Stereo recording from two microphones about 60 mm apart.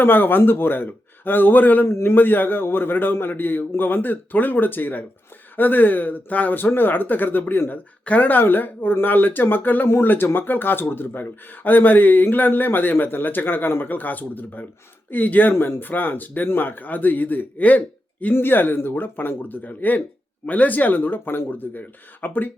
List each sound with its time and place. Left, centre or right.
0.0 s speech: left
1.9 s speech: left
8.0 s speech: left